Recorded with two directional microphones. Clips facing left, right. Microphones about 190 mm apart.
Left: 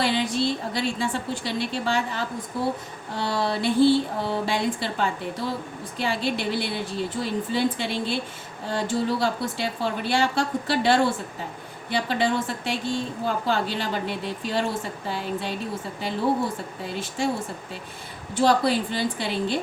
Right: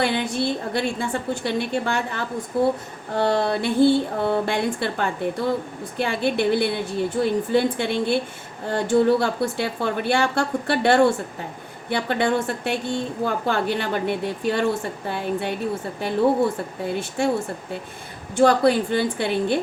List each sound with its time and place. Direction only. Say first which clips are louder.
0.0 s a woman's voice: right 1 dB; 55° right (ahead or behind)
16.8 s a woman's voice: right 5 dB; 55° right (ahead or behind)
18.3 s a woman's voice: right 4 dB; 55° right (ahead or behind)